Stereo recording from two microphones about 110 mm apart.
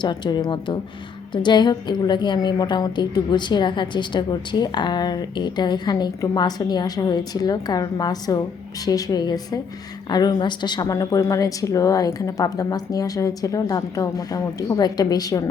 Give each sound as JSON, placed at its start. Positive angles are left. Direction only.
{"t": 0.0, "sound": "a woman's voice", "side_deg": 40}